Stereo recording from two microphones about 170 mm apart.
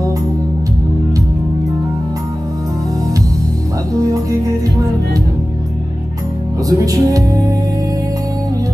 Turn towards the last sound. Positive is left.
turn(degrees=-20)  # may be behind; listen again after turning